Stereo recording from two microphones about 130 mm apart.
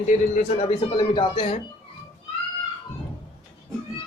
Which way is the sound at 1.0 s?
40° left (ahead or behind).